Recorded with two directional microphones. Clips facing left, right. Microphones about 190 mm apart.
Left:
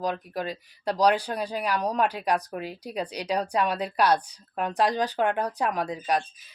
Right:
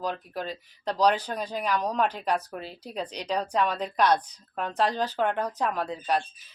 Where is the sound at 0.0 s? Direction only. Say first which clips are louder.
Left 3 dB; 10° left (ahead or behind).